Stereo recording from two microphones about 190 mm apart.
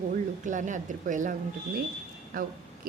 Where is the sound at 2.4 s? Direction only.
45° right (ahead or behind).